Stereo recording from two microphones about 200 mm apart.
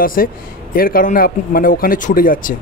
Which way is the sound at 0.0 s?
45° left (ahead or behind).